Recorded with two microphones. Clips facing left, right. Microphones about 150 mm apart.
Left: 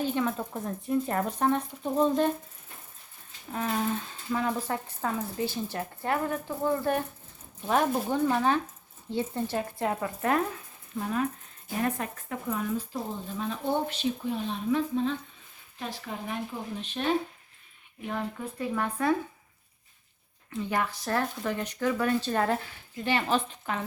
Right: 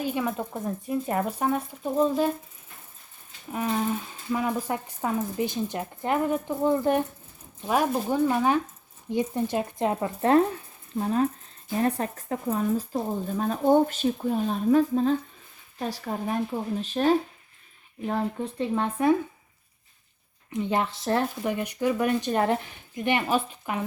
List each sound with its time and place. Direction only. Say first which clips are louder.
0.0 s speech: right 1 dB; 10° right (ahead or behind)
3.8 s speech: right 2 dB; 10° right (ahead or behind)
7.7 s speech: right 2 dB; 5° right (ahead or behind); by 19.1 s 20° right (ahead or behind)
20.5 s speech: right 4 dB; 20° right (ahead or behind)